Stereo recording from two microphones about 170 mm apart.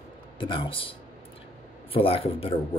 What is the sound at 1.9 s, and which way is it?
Speech, 35° left (ahead or behind).